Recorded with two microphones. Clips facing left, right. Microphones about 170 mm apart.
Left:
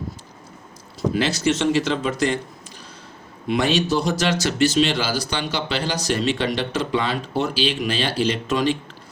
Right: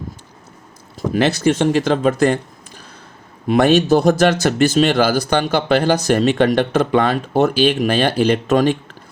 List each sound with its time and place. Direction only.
1.1 s speech: 55° right (ahead or behind)
3.4 s speech: 50° right (ahead or behind)